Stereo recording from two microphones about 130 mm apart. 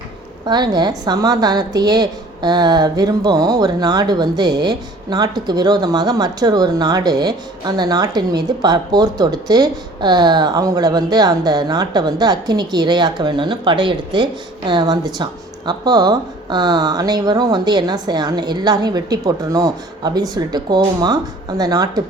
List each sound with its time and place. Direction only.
0.4 s a woman's voice: 35° right (ahead or behind)